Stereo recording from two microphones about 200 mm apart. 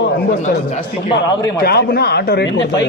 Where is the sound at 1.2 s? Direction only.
20° left (ahead or behind).